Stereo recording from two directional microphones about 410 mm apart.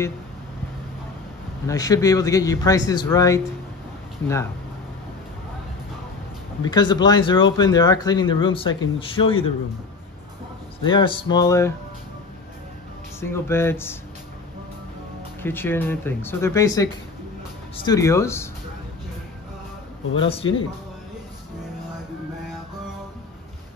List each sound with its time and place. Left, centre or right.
1.7 s speech: centre
6.6 s speech: centre
10.8 s speech: centre
13.2 s speech: centre
15.4 s speech: centre
20.2 s speech: centre